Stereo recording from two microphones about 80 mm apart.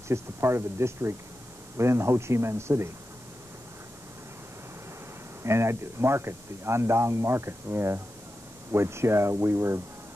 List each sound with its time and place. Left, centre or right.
0.1 s speech: right
5.4 s speech: right